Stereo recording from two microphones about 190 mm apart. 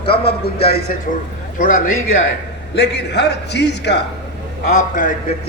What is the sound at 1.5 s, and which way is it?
Speech, 45° left (ahead or behind).